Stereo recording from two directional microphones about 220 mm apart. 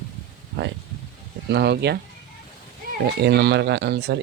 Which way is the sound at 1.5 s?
50° right (ahead or behind).